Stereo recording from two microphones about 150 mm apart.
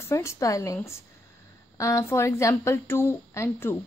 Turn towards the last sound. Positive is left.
turn(degrees=15)  # may be behind; listen again after turning